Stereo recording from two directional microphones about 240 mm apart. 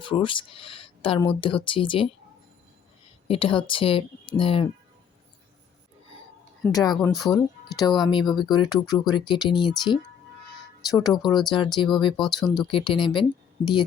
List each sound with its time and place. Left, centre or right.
0.0 s speech: left
3.2 s speech: left
6.7 s speech: centre
7.1 s speech: centre
8.1 s speech: centre
12.3 s speech: centre
12.7 s speech: left